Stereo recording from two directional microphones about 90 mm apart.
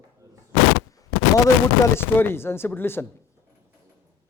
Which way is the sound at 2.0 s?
25° left (ahead or behind).